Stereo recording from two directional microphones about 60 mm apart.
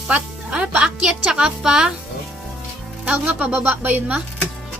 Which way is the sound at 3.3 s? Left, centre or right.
Right.